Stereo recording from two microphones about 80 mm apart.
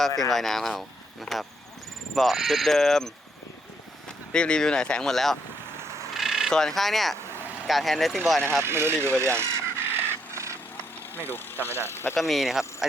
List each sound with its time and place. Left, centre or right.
0.3 s speech: centre
4.3 s speech: centre
6.1 s a sound: centre
6.5 s speech: centre
8.6 s bird: right
11.2 s speech: left
12.1 s speech: centre